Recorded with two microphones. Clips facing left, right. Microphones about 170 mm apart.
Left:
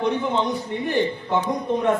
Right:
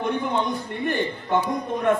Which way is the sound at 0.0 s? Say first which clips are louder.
Left 2 dB; 55° right (ahead or behind).